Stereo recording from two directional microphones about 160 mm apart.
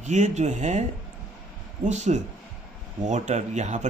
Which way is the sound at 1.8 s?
45° right (ahead or behind).